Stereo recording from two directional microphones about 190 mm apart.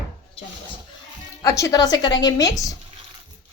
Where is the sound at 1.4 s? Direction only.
20° left (ahead or behind).